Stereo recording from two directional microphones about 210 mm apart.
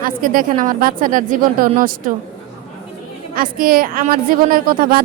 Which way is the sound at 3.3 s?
45° right (ahead or behind).